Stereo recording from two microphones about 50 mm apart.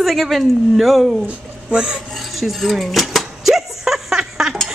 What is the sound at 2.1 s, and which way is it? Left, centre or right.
Dishes, centre.